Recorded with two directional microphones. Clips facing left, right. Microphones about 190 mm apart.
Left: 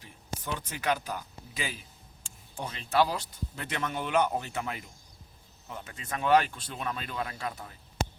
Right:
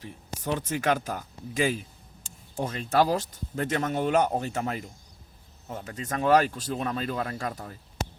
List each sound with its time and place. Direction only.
0.0 s speech: 40° right (ahead or behind)